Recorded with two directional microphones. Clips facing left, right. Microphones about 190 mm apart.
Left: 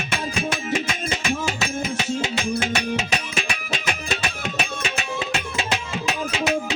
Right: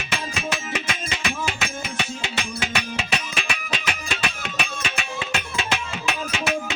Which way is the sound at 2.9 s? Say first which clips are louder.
Left 3 dB; 45° left (ahead or behind).